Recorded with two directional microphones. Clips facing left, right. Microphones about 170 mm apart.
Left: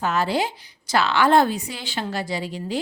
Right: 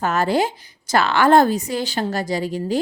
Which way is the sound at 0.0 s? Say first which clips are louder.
Right 3 dB; 50° right (ahead or behind).